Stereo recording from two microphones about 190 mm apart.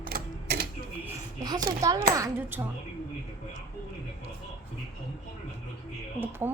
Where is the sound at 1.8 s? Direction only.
20° right (ahead or behind).